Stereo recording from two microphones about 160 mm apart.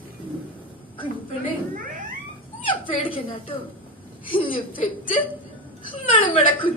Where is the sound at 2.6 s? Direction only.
30° left (ahead or behind).